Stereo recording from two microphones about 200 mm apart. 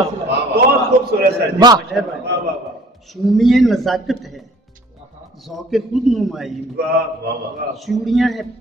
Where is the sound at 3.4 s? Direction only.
Centre (ahead or behind).